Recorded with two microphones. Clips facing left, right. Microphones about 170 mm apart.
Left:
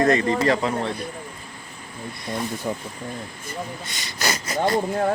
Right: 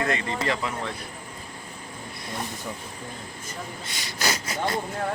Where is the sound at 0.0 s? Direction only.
40° left (ahead or behind).